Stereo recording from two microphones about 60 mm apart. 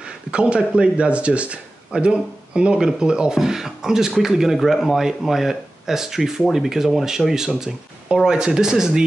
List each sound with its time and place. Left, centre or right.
0.0 s speech: centre